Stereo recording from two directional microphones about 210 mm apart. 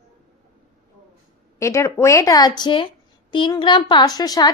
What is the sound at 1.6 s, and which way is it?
A woman's voice, 15° left (ahead or behind).